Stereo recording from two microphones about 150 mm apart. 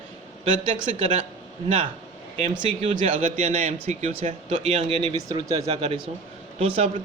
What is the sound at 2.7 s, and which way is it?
A man's voice, 45° right (ahead or behind).